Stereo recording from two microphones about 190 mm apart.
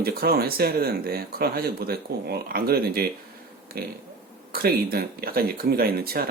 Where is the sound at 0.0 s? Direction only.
55° right (ahead or behind).